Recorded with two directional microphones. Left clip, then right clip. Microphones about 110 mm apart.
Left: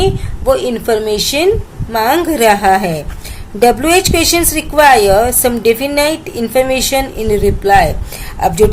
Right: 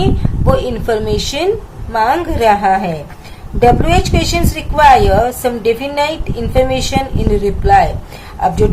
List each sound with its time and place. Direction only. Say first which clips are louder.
0.0 s a woman's voice: left 3 dB; 50° left (ahead or behind)
1.9 s a woman's voice: left 1 dB; 60° left (ahead or behind)